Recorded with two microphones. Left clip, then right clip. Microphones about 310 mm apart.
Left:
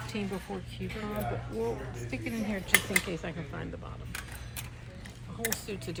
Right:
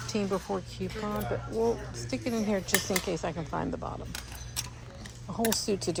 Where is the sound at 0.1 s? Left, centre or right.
Centre.